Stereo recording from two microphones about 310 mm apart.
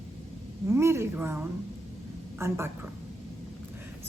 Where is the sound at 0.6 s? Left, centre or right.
Centre.